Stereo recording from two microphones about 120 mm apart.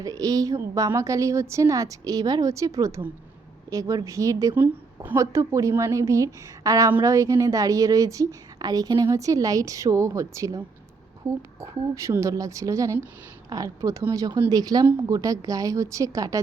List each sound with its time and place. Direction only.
0.0 s a woman's voice: 30° right (ahead or behind)
4.5 s a woman's voice: 15° right (ahead or behind)